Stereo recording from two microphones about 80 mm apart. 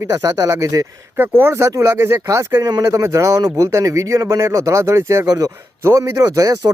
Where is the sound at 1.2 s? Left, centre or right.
Right.